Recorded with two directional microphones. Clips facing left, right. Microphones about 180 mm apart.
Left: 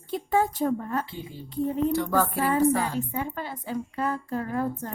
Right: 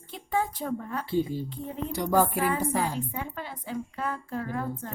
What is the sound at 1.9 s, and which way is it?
Music, 15° right (ahead or behind).